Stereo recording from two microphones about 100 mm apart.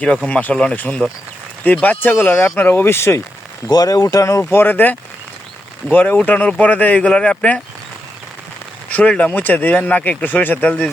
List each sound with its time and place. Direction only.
0.3 s speech: 15° left (ahead or behind)
3.7 s speech: 40° left (ahead or behind); by 7.6 s 10° left (ahead or behind)
8.9 s speech: 15° left (ahead or behind)